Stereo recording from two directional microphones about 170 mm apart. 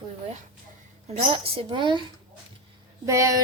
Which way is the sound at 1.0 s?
35° right (ahead or behind).